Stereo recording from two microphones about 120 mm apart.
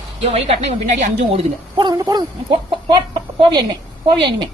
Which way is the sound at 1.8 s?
35° right (ahead or behind).